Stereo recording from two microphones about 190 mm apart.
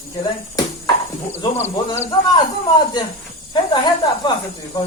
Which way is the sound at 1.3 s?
10° left (ahead or behind).